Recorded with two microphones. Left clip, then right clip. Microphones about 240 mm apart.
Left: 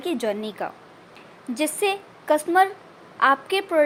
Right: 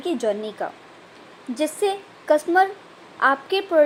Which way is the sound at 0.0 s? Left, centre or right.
Centre.